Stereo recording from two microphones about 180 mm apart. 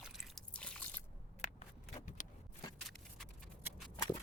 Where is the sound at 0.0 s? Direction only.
5° left (ahead or behind).